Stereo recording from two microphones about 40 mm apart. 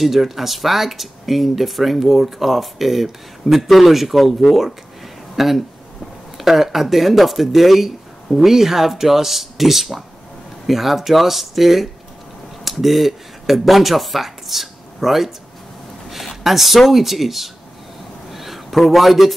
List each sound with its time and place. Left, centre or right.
0.0 s speech: centre
16.4 s speech: centre
18.3 s a sound: centre